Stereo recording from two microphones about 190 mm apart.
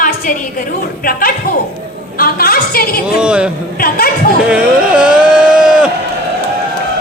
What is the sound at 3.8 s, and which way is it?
Speech, 50° left (ahead or behind).